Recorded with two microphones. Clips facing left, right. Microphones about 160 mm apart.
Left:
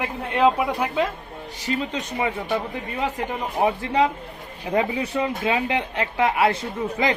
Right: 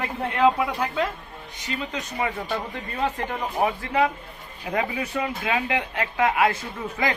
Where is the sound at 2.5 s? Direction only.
10° left (ahead or behind).